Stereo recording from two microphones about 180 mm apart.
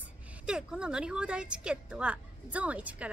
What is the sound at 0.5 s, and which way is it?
A woman's voice, 5° right (ahead or behind).